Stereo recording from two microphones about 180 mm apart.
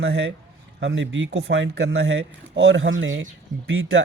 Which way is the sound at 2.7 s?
90° right.